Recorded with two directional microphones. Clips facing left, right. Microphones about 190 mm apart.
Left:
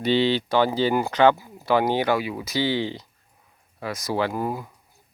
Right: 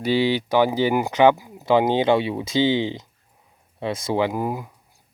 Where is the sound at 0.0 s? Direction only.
10° right (ahead or behind).